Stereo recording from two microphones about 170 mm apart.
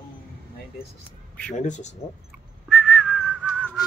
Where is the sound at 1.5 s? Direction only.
45° left (ahead or behind).